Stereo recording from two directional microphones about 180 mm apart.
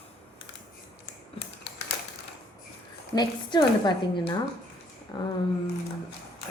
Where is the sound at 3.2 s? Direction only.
25° left (ahead or behind).